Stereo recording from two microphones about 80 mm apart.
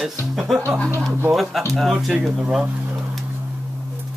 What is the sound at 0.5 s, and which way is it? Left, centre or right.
Speech, centre.